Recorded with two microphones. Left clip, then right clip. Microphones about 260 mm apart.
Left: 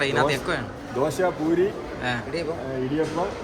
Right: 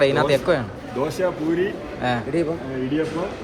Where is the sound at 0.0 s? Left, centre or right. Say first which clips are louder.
Right 5 dB; centre.